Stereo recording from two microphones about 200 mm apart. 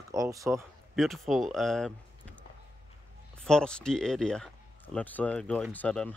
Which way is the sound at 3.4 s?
5° left (ahead or behind).